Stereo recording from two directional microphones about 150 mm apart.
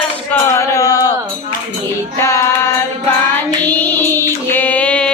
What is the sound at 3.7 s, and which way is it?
Female singing, 10° left (ahead or behind).